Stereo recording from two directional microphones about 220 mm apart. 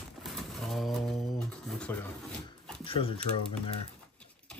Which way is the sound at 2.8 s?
25° left (ahead or behind).